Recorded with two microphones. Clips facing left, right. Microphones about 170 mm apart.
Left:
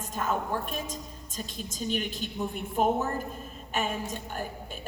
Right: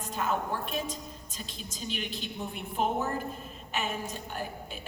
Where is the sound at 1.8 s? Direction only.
45° left (ahead or behind).